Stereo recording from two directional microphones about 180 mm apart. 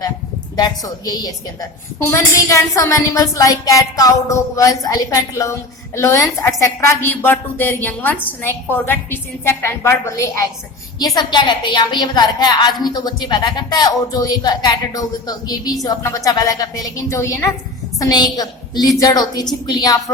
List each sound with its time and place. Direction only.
0.5 s a woman's voice: 20° left (ahead or behind)